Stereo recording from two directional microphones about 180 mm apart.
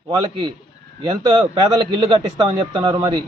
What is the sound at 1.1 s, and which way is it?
A man's voice, 25° right (ahead or behind).